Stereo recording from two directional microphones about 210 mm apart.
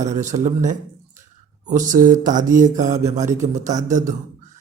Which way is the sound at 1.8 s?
40° right (ahead or behind).